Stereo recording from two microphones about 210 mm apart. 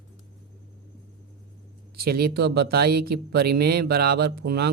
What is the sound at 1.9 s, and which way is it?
Speech, 45° right (ahead or behind).